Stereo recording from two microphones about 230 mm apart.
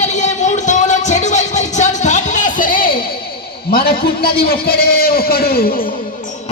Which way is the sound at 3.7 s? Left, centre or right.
Left.